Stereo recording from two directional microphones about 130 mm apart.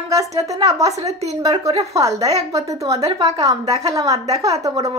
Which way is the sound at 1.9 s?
25° right (ahead or behind).